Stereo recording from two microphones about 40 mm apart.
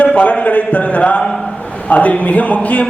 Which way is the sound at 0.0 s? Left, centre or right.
Left.